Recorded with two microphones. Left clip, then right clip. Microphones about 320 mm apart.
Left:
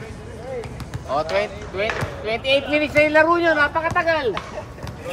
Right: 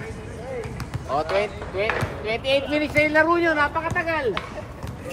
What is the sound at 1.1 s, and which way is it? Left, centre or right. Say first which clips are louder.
Speech: left 1 dB; left.